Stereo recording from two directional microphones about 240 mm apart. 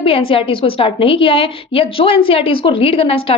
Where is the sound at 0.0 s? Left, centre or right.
Left.